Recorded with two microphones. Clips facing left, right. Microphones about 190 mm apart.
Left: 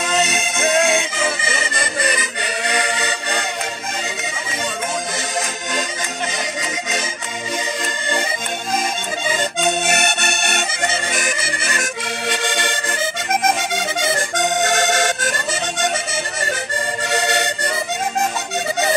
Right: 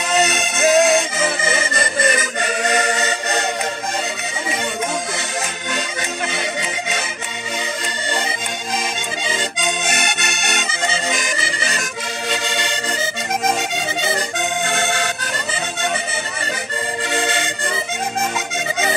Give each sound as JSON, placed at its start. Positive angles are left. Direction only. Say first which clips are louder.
{"t": 0.1, "sound": "music", "louder": "right 4 dB", "side_deg": -5}
{"t": 2.1, "sound": "music", "louder": "right 3 dB", "side_deg": -45}
{"t": 9.8, "sound": "accordion", "louder": "left 3 dB", "side_deg": 50}
{"t": 14.0, "sound": "accordion", "louder": "left 3 dB", "side_deg": 45}